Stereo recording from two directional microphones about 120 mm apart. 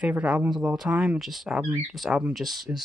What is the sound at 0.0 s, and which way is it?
Speech, 10° right (ahead or behind).